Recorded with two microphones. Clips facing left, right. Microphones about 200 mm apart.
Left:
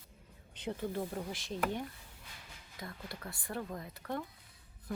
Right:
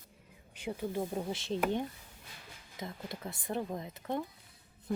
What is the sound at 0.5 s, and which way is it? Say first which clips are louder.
Speech: right 1 dB; 10° right (ahead or behind).